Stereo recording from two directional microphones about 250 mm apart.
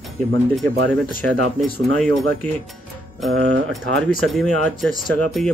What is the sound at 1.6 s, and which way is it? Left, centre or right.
Speech, centre.